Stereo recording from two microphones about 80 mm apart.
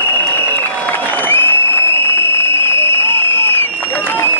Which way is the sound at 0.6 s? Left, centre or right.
Left.